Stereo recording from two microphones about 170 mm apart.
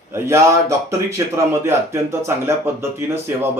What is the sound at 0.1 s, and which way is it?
Speech, 15° right (ahead or behind).